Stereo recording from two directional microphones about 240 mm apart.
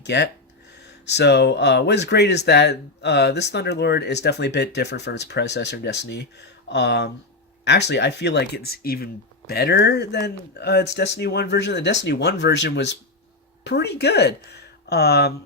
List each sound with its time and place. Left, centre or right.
0.0 s speech: left